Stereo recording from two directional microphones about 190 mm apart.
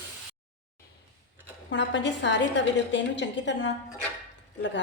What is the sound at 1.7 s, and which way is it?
A woman's voice, 70° left (ahead or behind).